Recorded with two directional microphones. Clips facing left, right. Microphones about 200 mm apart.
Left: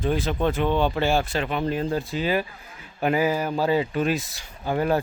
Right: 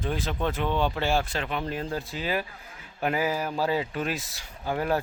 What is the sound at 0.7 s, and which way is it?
Speech, 25° left (ahead or behind).